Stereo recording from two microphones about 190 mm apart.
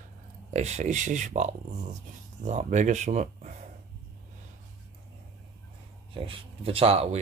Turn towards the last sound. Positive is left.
turn(degrees=-35)  # may be behind; listen again after turning